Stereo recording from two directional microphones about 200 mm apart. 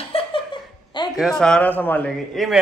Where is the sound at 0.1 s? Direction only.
25° left (ahead or behind).